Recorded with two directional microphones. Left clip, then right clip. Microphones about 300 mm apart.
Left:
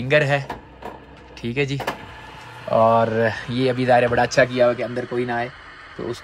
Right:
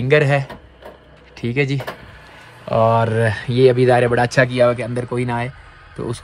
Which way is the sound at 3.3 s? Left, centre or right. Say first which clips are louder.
Right 8 dB; centre.